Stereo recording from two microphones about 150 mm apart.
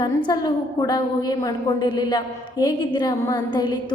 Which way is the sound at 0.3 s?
30° left (ahead or behind).